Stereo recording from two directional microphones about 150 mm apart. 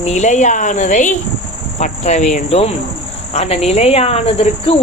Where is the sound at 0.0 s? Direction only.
50° left (ahead or behind).